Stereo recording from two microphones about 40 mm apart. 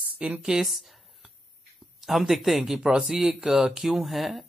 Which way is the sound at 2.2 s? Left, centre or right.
Centre.